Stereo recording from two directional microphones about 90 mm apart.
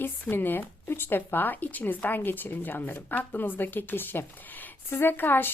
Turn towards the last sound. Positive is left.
turn(degrees=25)  # may be behind; listen again after turning